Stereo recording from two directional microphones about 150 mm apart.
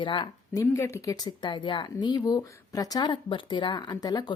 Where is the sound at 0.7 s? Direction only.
20° left (ahead or behind).